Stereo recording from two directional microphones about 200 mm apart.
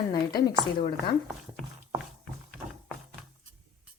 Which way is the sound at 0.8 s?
25° left (ahead or behind).